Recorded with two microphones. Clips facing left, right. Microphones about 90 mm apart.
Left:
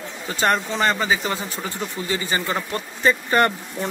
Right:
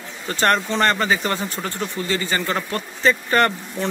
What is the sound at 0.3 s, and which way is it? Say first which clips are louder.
Speech: right 2 dB; 5° left (ahead or behind).